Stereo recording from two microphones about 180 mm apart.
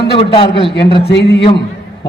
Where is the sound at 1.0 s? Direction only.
70° left (ahead or behind).